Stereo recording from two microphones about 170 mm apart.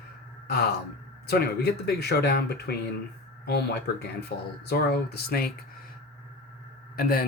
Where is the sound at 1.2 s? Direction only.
70° left (ahead or behind).